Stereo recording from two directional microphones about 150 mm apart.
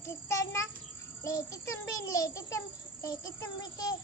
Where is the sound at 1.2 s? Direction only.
20° left (ahead or behind).